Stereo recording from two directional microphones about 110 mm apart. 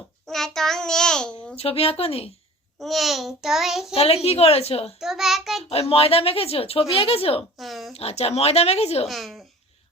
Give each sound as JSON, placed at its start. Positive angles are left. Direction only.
{"t": 0.3, "sound": "a child's voice", "side_deg": 5}
{"t": 1.5, "sound": "a woman's voice", "side_deg": 65}
{"t": 2.7, "sound": "a child's voice", "side_deg": 0}
{"t": 3.9, "sound": "a woman's voice", "side_deg": 65}
{"t": 4.9, "sound": "a child's voice", "side_deg": -5}
{"t": 5.9, "sound": "a woman's voice", "side_deg": 60}
{"t": 7.6, "sound": "a child's voice", "side_deg": 0}
{"t": 7.9, "sound": "a woman's voice", "side_deg": 70}
{"t": 9.0, "sound": "a child's voice", "side_deg": 0}